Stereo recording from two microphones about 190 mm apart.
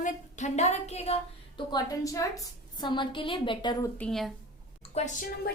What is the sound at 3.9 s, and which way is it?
Speech, 5° left (ahead or behind).